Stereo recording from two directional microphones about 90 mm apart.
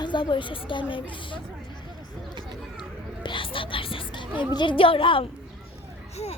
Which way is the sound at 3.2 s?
70° left (ahead or behind).